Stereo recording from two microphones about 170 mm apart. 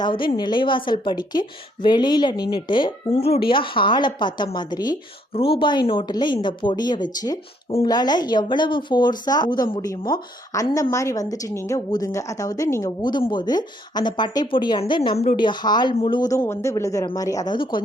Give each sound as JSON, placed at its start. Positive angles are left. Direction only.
{"t": 0.0, "sound": "a woman's voice", "side_deg": 25}